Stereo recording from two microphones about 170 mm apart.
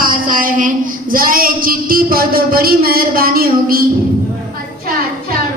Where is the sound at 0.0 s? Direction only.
55° right (ahead or behind).